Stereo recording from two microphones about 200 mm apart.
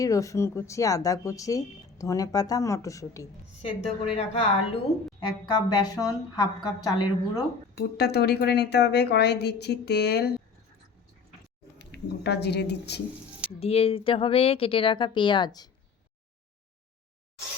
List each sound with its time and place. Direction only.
0.0 s speech: 15° left (ahead or behind)
4.0 s a woman's voice: 30° left (ahead or behind)
7.8 s speech: 55° left (ahead or behind)
11.8 s speech: 55° left (ahead or behind)
13.6 s a woman's voice: 30° left (ahead or behind)